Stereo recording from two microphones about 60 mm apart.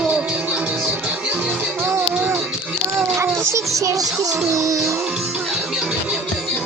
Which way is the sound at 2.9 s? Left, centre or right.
Right.